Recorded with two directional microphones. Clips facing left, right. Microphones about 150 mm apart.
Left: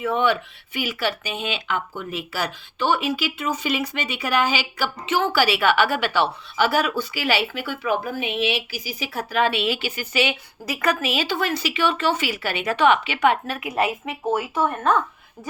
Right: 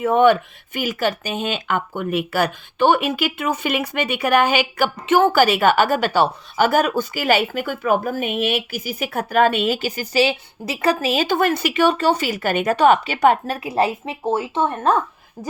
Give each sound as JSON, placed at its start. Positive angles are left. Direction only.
{"t": 0.0, "sound": "speech", "side_deg": -50}